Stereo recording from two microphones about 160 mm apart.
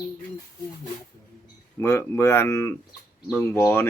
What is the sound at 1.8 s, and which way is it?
Speech, 15° left (ahead or behind).